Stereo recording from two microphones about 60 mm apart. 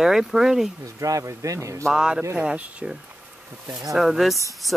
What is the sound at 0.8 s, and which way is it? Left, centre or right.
Speech, right.